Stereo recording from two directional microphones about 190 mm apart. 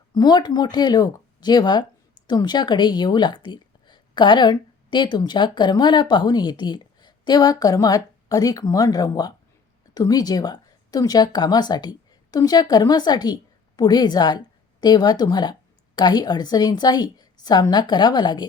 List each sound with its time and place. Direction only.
0.1 s a woman's voice: 20° left (ahead or behind)